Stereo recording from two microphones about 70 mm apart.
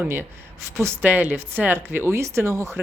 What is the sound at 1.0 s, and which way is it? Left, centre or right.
Speech, right.